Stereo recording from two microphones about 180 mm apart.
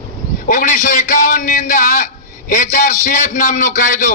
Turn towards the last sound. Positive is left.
turn(degrees=45)  # may be behind; listen again after turning